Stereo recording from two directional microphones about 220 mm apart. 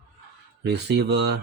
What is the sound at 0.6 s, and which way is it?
Speech, 50° right (ahead or behind).